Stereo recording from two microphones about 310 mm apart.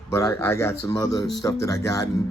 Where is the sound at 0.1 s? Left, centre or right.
Centre.